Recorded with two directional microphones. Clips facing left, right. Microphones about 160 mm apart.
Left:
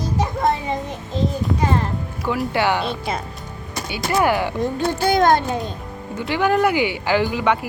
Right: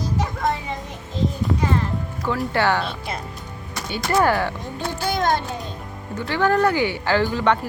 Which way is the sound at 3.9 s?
10° left (ahead or behind).